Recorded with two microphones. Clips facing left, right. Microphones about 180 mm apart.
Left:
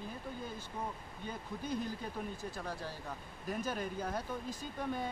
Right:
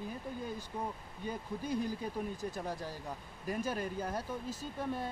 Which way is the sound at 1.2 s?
10° right (ahead or behind).